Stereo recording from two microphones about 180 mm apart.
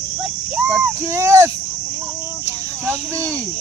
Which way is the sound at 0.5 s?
10° right (ahead or behind).